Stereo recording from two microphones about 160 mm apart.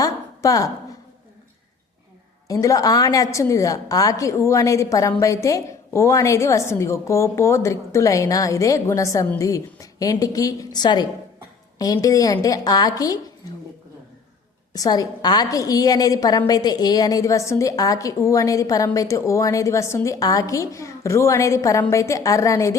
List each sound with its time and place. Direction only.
0.0 s a sound: 20° left (ahead or behind)
2.5 s a woman's voice: 20° left (ahead or behind)
14.7 s a woman's voice: 25° left (ahead or behind)